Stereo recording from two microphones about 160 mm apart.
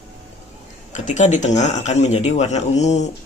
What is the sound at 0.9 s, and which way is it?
Speech, 50° left (ahead or behind).